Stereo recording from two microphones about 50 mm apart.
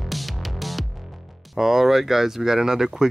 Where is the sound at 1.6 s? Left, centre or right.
Centre.